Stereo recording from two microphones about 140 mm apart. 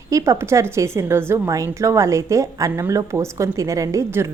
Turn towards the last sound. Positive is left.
turn(degrees=-20)  # may be behind; listen again after turning